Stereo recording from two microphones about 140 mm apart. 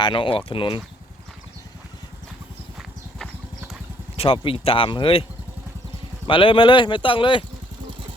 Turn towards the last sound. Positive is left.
turn(degrees=40)  # may be behind; listen again after turning